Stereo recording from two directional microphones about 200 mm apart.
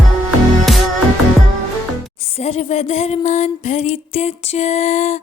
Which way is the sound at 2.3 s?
30° left (ahead or behind).